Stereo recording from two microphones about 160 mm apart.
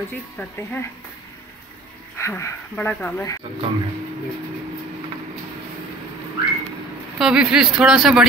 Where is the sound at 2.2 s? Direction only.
20° left (ahead or behind).